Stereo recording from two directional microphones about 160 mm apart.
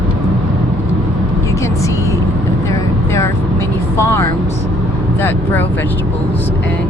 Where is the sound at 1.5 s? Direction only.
20° left (ahead or behind).